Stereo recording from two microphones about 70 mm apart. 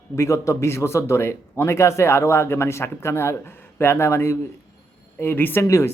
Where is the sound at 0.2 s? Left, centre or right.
Left.